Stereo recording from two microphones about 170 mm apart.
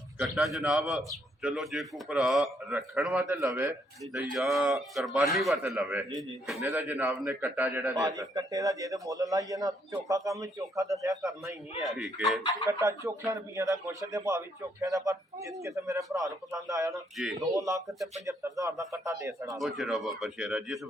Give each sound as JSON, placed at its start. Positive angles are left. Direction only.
{"t": 0.2, "sound": "a man's voice", "side_deg": 0}
{"t": 6.6, "sound": "a man's voice", "side_deg": -15}
{"t": 11.9, "sound": "a man's voice", "side_deg": 0}
{"t": 12.8, "sound": "a man's voice", "side_deg": -15}
{"t": 19.5, "sound": "a man's voice", "side_deg": 0}